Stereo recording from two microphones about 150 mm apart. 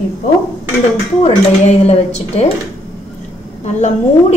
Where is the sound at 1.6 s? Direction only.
45° left (ahead or behind).